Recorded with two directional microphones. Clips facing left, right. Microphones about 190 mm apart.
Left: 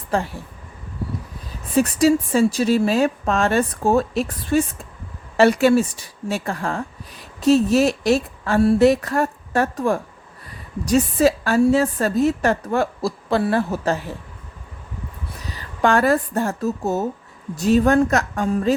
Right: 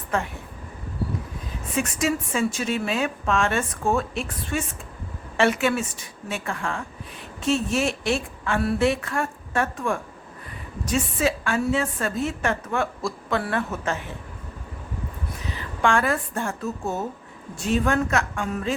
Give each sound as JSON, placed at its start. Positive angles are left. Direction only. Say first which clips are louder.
{"t": 0.1, "sound": "speech", "louder": "left 4 dB", "side_deg": 35}
{"t": 1.7, "sound": "a woman's voice", "louder": "left 9 dB", "side_deg": 35}
{"t": 15.4, "sound": "a woman's voice", "louder": "left 4 dB", "side_deg": 40}